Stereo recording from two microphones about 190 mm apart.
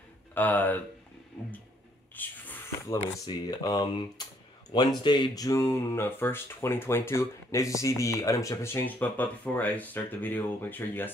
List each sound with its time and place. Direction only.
0.3 s speech: 10° left (ahead or behind)
2.1 s a sound: 10° left (ahead or behind)
3.3 s speech: 20° left (ahead or behind)